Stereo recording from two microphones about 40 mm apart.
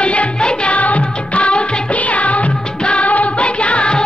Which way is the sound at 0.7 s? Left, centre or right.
Left.